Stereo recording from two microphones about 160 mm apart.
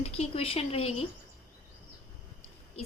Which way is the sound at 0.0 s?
40° left (ahead or behind).